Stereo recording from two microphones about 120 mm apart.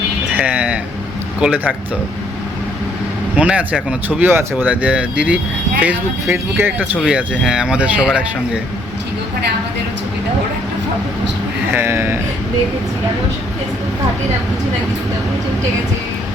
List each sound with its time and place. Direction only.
0.3 s speech: 10° right (ahead or behind)
3.3 s speech: 10° right (ahead or behind)
7.0 s speech: 5° right (ahead or behind)
11.7 s speech: 20° right (ahead or behind)